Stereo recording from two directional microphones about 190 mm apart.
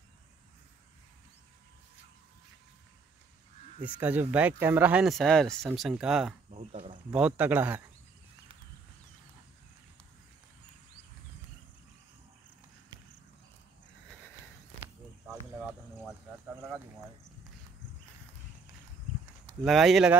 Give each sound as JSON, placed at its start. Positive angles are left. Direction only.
{"t": 4.0, "sound": "speech", "side_deg": -10}
{"t": 6.5, "sound": "speech", "side_deg": -35}
{"t": 7.2, "sound": "speech", "side_deg": -5}
{"t": 19.6, "sound": "speech", "side_deg": 0}